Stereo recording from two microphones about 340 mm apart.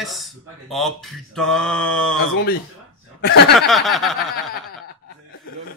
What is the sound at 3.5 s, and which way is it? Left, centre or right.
Speech, centre.